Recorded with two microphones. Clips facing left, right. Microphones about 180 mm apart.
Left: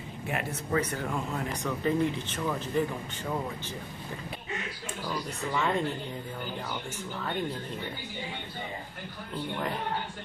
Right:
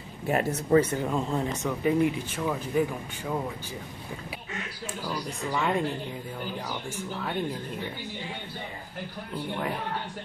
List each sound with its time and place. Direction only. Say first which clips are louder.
0.3 s speech: right 8 dB; 40° right (ahead or behind); by 1.7 s 25° right (ahead or behind)
1.7 s speech: right 3 dB; 15° right (ahead or behind)
5.0 s speech: right 1 dB; 10° right (ahead or behind)